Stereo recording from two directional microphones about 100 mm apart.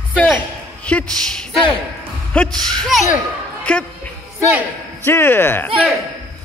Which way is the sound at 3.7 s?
10° left (ahead or behind).